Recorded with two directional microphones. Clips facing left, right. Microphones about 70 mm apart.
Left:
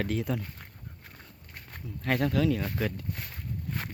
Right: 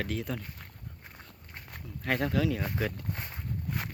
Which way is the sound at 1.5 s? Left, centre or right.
Centre.